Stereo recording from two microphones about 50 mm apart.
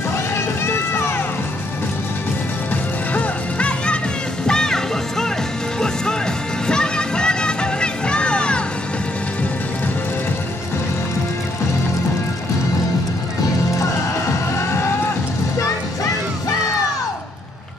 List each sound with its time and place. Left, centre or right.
0.7 s run: left
2.7 s music: left; by 5.3 s centre
6.7 s music: centre
13.7 s music: left